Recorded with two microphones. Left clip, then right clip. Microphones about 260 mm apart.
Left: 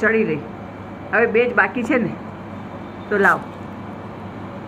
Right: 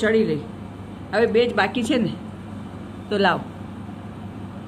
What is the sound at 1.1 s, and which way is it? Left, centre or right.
Speech, centre.